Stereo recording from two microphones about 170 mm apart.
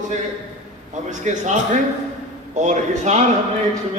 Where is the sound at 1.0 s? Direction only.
45° right (ahead or behind).